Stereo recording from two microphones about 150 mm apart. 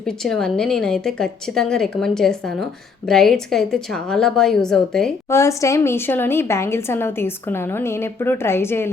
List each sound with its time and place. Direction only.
0.0 s a woman's voice: 5° left (ahead or behind)
5.3 s a woman's voice: 20° left (ahead or behind)